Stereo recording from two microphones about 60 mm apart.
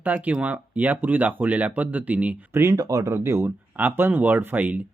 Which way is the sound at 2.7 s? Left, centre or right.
Right.